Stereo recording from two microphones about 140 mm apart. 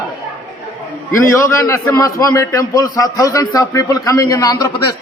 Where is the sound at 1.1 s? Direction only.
20° left (ahead or behind).